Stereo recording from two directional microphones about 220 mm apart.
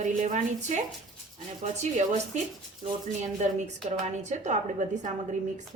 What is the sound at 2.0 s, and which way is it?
A woman's voice, 30° right (ahead or behind).